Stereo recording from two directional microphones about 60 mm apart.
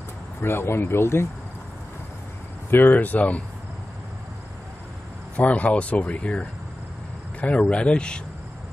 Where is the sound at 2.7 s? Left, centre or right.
Left.